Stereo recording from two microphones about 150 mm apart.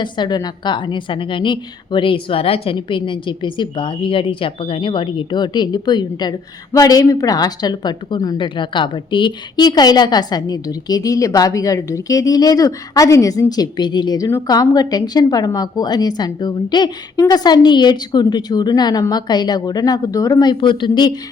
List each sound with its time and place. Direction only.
0.0 s a woman's voice: 30° left (ahead or behind)